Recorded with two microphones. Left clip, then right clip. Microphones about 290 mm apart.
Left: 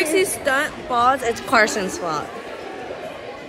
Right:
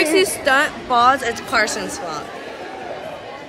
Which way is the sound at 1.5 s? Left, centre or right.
Left.